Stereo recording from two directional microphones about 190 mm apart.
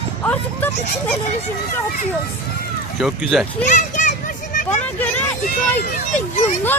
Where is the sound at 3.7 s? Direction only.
40° left (ahead or behind).